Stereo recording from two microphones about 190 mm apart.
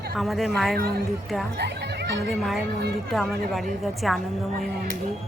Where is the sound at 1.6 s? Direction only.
60° right (ahead or behind).